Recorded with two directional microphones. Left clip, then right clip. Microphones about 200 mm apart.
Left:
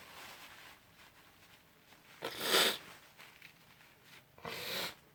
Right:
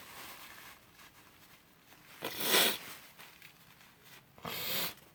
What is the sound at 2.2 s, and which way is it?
Zipper, 20° right (ahead or behind).